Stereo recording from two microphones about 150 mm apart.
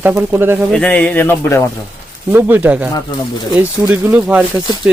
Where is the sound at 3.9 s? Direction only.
10° right (ahead or behind).